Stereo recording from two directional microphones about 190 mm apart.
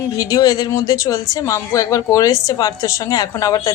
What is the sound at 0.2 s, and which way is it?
A woman's voice, 20° left (ahead or behind).